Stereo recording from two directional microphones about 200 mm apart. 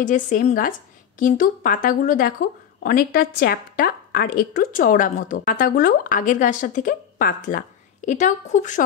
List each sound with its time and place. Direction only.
0.0 s a woman's voice: 40° left (ahead or behind)